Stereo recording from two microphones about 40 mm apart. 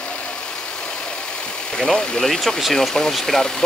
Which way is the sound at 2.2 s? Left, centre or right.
Centre.